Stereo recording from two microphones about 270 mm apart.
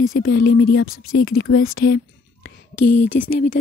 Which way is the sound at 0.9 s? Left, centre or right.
Left.